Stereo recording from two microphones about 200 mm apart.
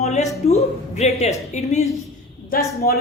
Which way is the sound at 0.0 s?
35° left (ahead or behind).